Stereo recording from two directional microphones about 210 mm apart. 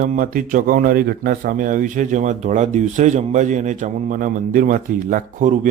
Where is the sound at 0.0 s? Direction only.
40° right (ahead or behind).